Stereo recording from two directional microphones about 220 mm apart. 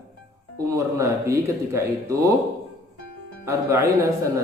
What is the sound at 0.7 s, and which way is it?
A man's voice, 15° right (ahead or behind).